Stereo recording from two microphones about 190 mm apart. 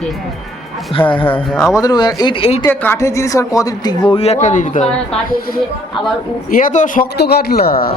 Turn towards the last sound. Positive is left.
turn(degrees=50)  # may be behind; listen again after turning